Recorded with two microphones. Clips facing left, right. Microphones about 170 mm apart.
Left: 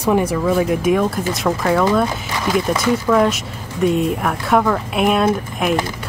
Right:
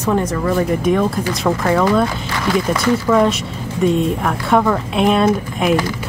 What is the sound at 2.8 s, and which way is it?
A woman's voice, centre (ahead or behind).